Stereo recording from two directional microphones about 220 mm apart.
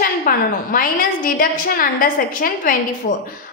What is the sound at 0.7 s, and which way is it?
A woman's voice, 40° left (ahead or behind).